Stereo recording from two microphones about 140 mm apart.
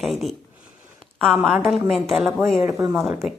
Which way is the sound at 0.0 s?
Centre (ahead or behind).